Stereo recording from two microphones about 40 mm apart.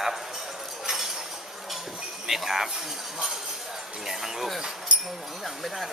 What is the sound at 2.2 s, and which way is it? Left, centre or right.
Speech, centre.